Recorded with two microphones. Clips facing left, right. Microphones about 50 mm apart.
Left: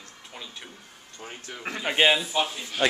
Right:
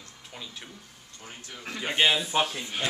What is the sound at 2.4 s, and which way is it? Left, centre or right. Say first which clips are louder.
Speech: even; right.